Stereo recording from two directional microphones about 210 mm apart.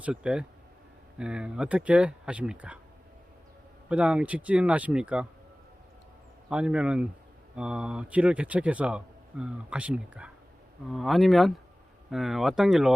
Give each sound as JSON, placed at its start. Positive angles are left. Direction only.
{"t": 0.0, "sound": "a man's voice", "side_deg": -5}
{"t": 3.8, "sound": "a man's voice", "side_deg": -5}
{"t": 6.5, "sound": "a man's voice", "side_deg": -5}